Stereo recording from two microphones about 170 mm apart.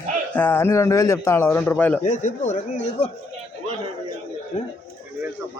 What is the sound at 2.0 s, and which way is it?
Speech, 45° left (ahead or behind).